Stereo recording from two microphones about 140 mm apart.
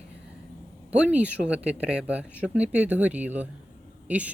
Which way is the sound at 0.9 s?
10° right (ahead or behind).